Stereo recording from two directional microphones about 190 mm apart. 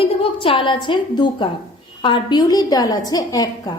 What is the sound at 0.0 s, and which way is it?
A woman's voice, 30° left (ahead or behind).